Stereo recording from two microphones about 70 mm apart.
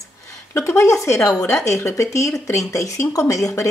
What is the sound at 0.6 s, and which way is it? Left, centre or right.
A woman's voice, left.